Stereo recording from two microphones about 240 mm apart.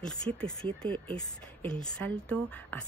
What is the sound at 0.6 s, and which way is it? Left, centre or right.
Speech, right.